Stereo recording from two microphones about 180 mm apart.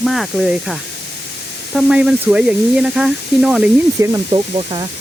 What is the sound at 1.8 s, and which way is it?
Speech, 5° right (ahead or behind).